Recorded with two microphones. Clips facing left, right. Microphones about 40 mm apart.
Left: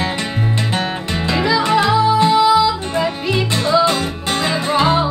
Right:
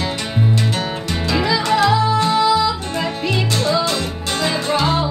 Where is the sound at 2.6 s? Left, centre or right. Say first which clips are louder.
Left 3 dB; centre.